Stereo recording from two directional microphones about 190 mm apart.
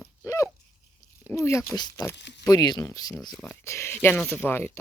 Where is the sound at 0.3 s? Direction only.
15° left (ahead or behind).